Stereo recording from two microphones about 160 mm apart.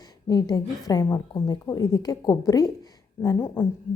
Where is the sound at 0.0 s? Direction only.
25° left (ahead or behind).